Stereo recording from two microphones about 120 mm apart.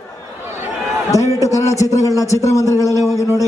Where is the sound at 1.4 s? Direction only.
25° left (ahead or behind).